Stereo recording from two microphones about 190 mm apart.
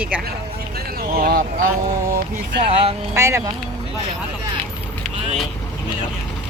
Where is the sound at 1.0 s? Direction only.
50° right (ahead or behind).